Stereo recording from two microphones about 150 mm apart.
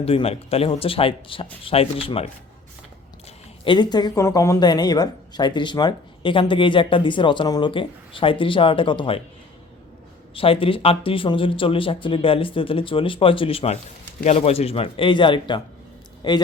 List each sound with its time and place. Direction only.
0.0 s speech: 40° left (ahead or behind)
3.6 s speech: 30° left (ahead or behind)
10.3 s a man's voice: 35° left (ahead or behind)